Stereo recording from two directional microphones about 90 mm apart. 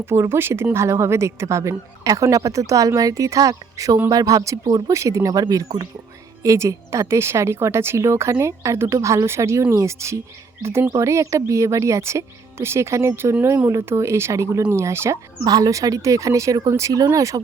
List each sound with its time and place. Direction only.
0.0 s speech: 25° right (ahead or behind); by 4.8 s 45° right (ahead or behind)
4.9 s speech: 35° right (ahead or behind)
15.4 s speech: 45° right (ahead or behind)